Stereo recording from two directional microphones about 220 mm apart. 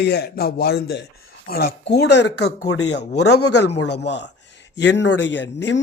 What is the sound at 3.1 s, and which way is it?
Speech, 90° left.